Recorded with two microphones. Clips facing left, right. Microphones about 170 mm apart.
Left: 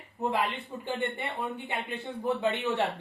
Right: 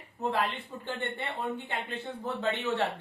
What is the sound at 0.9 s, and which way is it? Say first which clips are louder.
A man's voice: left 3 dB; 15° left (ahead or behind).